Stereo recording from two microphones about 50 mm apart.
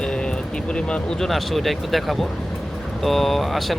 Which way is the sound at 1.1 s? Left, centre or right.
Centre.